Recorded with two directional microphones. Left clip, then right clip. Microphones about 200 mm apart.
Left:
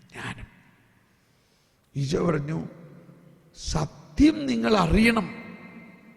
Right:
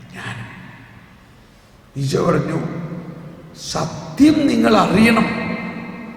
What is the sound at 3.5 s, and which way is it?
A man's voice, 40° left (ahead or behind).